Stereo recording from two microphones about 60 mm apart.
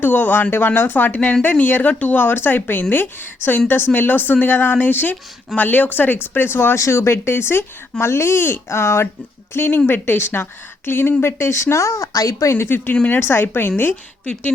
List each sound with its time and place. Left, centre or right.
0.0 s speech: left
6.7 s speech: left
11.9 s speech: left
12.5 s speech: left